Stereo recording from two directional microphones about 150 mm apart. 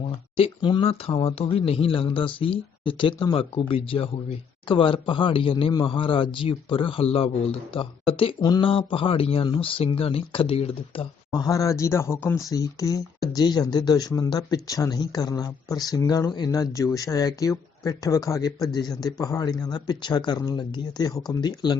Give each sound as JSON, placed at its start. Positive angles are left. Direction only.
{"t": 0.3, "sound": "speech", "side_deg": 35}
{"t": 11.3, "sound": "speech", "side_deg": 25}